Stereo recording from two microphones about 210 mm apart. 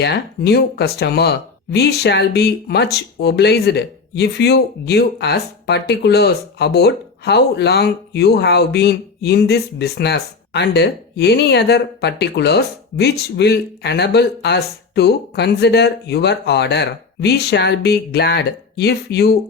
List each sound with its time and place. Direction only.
0.0 s speech: 50° left (ahead or behind)